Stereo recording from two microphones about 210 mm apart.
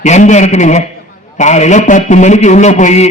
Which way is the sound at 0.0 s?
35° left (ahead or behind).